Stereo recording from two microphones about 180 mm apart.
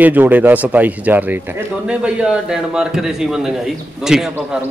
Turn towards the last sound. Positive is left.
turn(degrees=-5)  # may be behind; listen again after turning